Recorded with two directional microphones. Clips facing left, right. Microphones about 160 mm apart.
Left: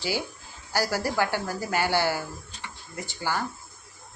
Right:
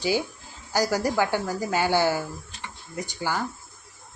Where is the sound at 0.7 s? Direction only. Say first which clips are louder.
Right 3 dB; 15° right (ahead or behind).